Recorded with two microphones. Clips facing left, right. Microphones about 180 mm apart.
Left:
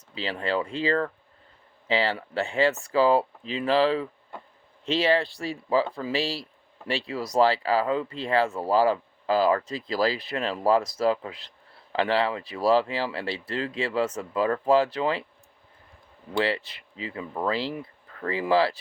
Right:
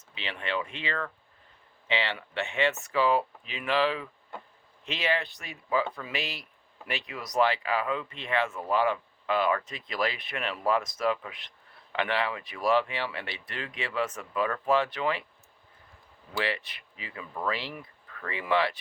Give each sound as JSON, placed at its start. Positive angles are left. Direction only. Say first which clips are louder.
{"t": 0.1, "sound": "speech", "louder": "left 6 dB", "side_deg": 35}
{"t": 16.3, "sound": "speech", "louder": "left 6 dB", "side_deg": 30}